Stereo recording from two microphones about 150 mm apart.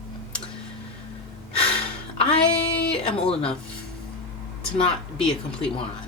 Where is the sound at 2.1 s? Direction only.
40° left (ahead or behind).